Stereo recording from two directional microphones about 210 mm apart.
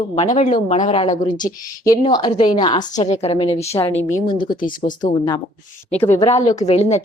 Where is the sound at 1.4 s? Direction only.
15° left (ahead or behind).